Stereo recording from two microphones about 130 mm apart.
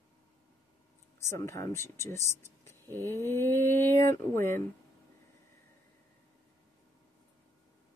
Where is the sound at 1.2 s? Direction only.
20° left (ahead or behind).